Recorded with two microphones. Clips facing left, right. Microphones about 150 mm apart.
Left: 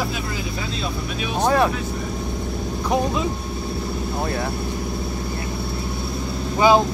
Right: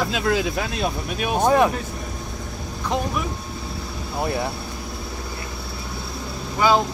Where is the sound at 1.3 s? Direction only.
15° right (ahead or behind).